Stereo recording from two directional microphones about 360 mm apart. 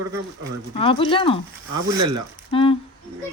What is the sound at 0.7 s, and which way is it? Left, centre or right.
Speech, centre.